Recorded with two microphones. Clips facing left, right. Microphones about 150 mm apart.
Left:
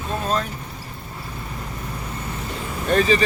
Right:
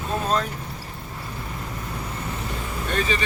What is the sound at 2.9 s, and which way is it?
Speech, 40° left (ahead or behind).